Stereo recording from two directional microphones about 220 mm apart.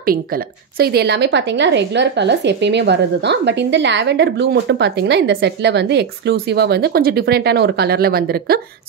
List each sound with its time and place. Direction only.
0.7 s a woman's voice: 45° right (ahead or behind)